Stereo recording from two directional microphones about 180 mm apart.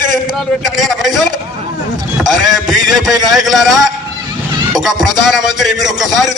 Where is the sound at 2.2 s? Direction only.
Centre (ahead or behind).